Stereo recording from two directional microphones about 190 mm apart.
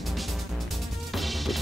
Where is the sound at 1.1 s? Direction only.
Centre (ahead or behind).